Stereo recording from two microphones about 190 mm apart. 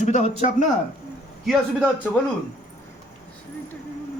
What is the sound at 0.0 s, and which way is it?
Speech, 35° left (ahead or behind).